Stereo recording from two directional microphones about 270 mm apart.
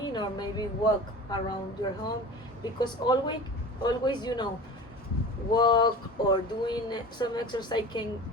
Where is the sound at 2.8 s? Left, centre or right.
Centre.